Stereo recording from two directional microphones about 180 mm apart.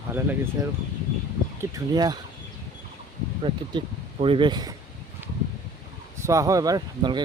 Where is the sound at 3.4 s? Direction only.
30° right (ahead or behind).